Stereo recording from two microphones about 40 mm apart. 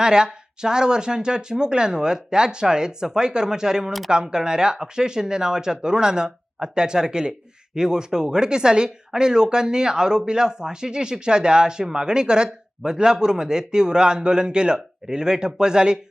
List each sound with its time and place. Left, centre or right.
0.0 s speech: centre